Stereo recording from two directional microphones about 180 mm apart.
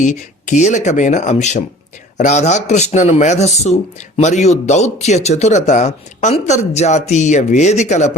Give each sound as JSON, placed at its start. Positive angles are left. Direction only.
{"t": 0.0, "sound": "speech", "side_deg": 45}